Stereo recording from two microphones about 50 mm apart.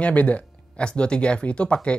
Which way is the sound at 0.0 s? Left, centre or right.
Left.